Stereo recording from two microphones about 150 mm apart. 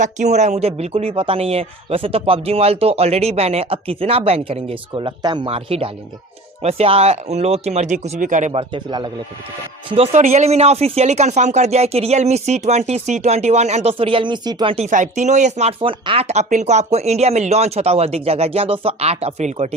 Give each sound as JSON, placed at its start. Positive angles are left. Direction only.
{"t": 0.0, "sound": "speech", "side_deg": -50}
{"t": 8.5, "sound": "speech", "side_deg": -30}
{"t": 9.9, "sound": "speech", "side_deg": -45}
{"t": 14.8, "sound": "speech", "side_deg": -55}
{"t": 15.8, "sound": "speech", "side_deg": -35}